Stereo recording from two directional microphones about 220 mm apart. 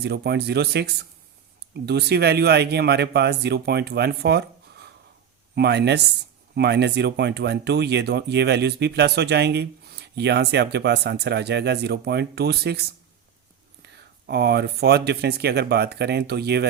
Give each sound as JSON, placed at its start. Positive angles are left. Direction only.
{"t": 0.0, "sound": "speech", "side_deg": -45}
{"t": 13.8, "sound": "speech", "side_deg": -50}